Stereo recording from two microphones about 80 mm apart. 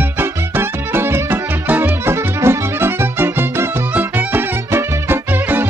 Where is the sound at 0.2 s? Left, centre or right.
Right.